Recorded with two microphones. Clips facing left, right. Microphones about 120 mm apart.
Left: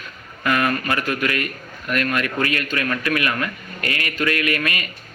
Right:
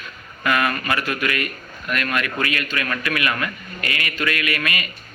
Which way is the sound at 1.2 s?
30° left (ahead or behind).